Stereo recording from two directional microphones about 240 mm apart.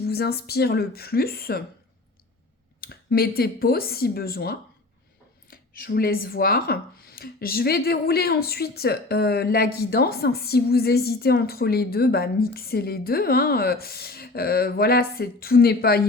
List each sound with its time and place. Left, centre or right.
0.0 s speech: left
2.8 s speech: left